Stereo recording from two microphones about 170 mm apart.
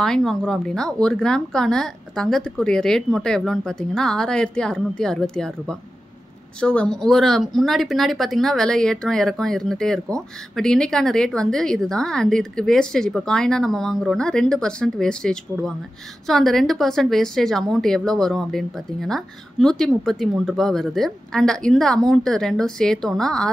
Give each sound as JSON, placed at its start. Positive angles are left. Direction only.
{"t": 0.0, "sound": "speech", "side_deg": 5}